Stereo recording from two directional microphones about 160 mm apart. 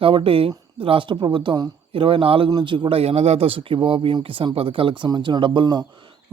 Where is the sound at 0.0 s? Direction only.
35° right (ahead or behind).